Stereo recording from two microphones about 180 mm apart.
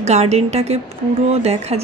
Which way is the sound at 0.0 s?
40° right (ahead or behind).